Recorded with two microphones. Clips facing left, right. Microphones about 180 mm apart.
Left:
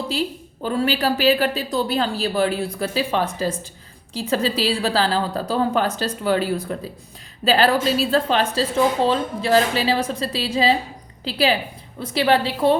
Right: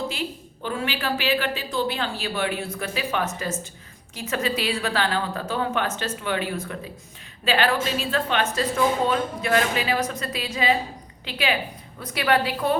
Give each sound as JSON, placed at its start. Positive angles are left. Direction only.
{"t": 0.1, "sound": "a woman's voice", "side_deg": 35}